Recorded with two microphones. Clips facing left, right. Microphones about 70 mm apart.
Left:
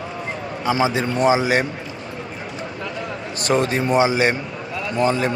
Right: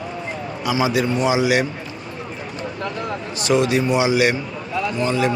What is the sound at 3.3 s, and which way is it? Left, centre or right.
A man's voice, left.